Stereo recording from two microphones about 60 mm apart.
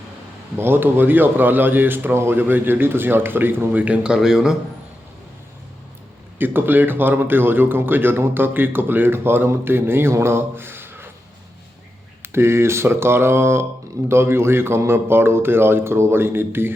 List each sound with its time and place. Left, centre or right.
0.5 s a man's voice: right
3.8 s a man's voice: right
4.1 s speech: centre
6.4 s a man's voice: right
12.2 s speech: right